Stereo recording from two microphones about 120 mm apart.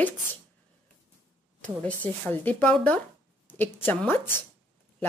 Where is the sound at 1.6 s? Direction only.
10° left (ahead or behind).